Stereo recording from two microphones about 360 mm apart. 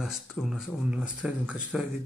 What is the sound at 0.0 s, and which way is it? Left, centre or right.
Speech, centre.